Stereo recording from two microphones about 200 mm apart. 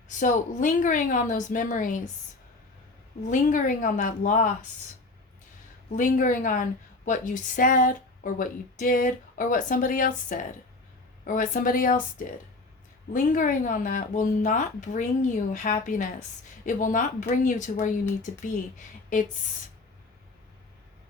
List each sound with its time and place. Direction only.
0.2 s a woman's voice: 40° left (ahead or behind)
3.2 s a woman's voice: 40° left (ahead or behind)
6.0 s a woman's voice: 40° left (ahead or behind)